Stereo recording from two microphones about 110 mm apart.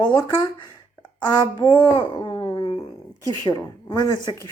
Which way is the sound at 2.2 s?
40° left (ahead or behind).